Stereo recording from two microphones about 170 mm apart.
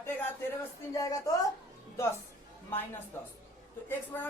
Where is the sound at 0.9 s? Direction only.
20° left (ahead or behind).